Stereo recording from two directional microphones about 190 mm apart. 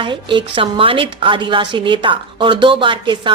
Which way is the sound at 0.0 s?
25° right (ahead or behind).